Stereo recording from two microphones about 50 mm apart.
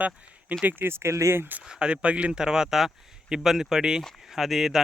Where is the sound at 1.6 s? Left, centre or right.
Centre.